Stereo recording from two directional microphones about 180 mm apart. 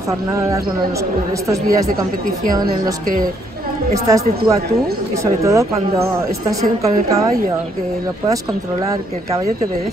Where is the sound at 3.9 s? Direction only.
20° right (ahead or behind).